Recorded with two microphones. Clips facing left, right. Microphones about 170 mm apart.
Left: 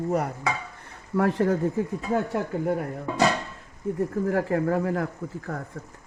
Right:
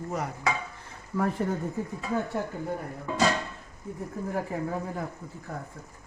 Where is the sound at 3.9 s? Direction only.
85° left.